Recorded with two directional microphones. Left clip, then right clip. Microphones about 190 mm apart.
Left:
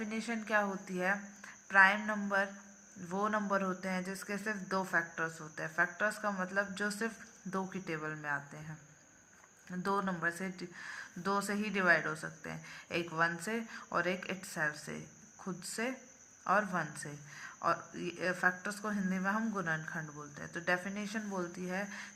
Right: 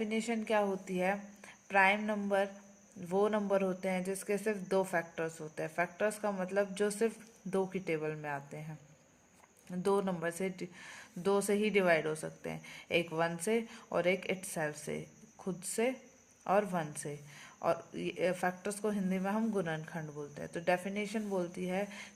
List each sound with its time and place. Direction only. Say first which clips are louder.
0.0 s speech: right 4 dB; 30° right (ahead or behind)
9.6 s speech: right 2 dB; 30° right (ahead or behind)
10.6 s speech: right 2 dB; 40° right (ahead or behind)
11.2 s speech: right 4 dB; 30° right (ahead or behind)